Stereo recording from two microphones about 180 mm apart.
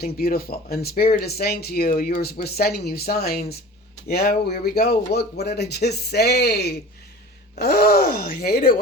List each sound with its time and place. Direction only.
0.0 s speech: 60° left (ahead or behind)